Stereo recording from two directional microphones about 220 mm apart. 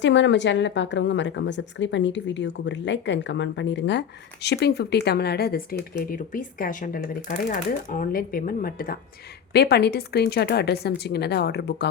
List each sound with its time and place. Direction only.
0.0 s speech: 55° left (ahead or behind)